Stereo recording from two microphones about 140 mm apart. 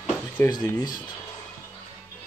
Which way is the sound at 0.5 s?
30° left (ahead or behind).